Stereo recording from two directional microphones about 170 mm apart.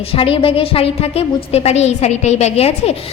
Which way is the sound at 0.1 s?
35° left (ahead or behind).